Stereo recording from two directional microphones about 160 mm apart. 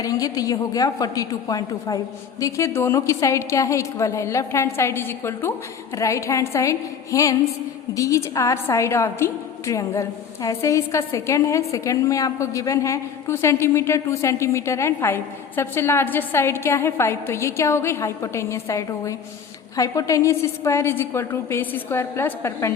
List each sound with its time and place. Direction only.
0.0 s a woman's voice: 20° left (ahead or behind)